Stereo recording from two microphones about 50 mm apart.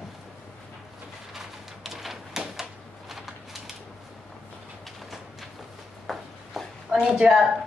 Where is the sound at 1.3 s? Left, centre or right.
Centre.